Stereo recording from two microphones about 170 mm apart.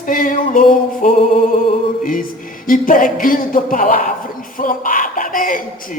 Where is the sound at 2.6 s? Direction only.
55° left (ahead or behind).